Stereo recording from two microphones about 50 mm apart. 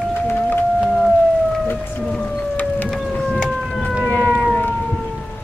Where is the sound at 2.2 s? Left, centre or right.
Left.